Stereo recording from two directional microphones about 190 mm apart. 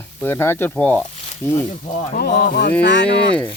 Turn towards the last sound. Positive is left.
turn(degrees=65)  # may be behind; listen again after turning